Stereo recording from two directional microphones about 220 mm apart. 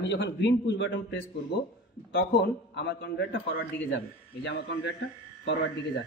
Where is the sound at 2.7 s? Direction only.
50° left (ahead or behind).